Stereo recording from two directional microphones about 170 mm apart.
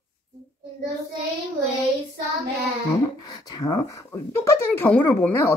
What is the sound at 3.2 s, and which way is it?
Speech, 25° left (ahead or behind).